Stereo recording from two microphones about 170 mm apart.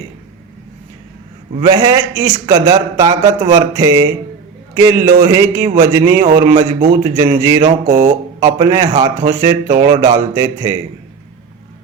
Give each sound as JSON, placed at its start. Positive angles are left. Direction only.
{"t": 1.7, "sound": "a man's voice", "side_deg": -20}